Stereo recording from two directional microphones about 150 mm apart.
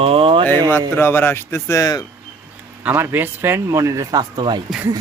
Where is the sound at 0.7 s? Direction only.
15° left (ahead or behind).